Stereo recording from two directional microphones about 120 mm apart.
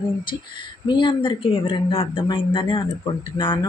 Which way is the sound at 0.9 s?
40° left (ahead or behind).